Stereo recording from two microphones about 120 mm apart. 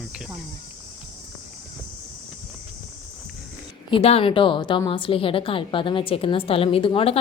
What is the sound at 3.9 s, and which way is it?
A woman's voice, 50° left (ahead or behind).